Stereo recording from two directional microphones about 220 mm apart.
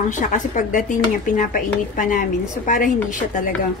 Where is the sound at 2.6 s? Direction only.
35° left (ahead or behind).